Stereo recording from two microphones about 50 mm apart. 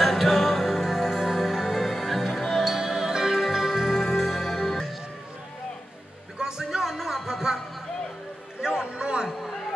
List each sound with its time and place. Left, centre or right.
0.0 s music: centre
6.3 s music: centre
8.5 s a sound: centre